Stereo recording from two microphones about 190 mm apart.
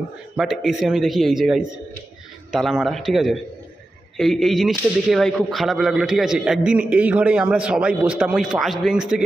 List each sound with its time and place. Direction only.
0.4 s speech: 5° right (ahead or behind)